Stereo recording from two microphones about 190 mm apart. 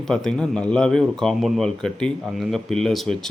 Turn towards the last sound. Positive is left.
turn(degrees=5)  # may be behind; listen again after turning